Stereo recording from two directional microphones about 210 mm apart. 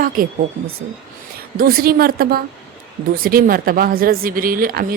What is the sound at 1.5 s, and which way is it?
Speech, 45° right (ahead or behind).